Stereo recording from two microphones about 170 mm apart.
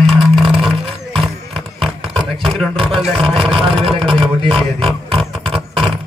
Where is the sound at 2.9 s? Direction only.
Centre (ahead or behind).